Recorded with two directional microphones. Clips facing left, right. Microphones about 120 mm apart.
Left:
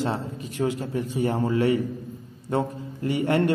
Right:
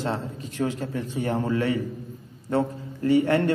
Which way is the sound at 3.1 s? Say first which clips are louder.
Right 2 dB; 15° left (ahead or behind).